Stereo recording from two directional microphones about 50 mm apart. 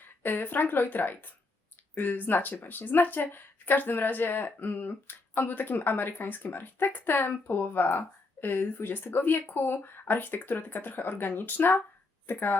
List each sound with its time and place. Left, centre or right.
0.0 s a woman's voice: left